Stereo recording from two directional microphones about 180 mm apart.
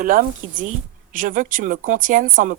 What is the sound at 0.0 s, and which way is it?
Speech, 50° right (ahead or behind).